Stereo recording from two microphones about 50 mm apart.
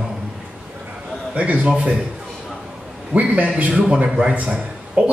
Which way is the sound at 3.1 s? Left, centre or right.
Right.